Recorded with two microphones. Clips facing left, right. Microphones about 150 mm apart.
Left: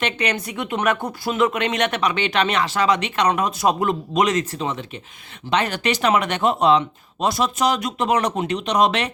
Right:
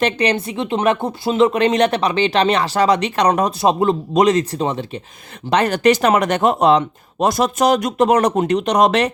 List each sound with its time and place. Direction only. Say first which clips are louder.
0.0 s speech: right 6 dB; 30° right (ahead or behind)
3.7 s speech: right 4 dB; 25° right (ahead or behind)